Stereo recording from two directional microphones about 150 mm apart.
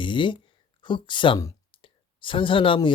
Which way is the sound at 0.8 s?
30° left (ahead or behind).